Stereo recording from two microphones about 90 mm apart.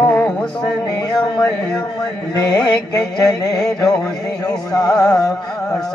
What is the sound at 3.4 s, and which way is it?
Carnatic music, 45° left (ahead or behind).